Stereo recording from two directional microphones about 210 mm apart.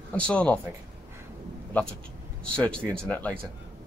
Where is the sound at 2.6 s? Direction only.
5° left (ahead or behind).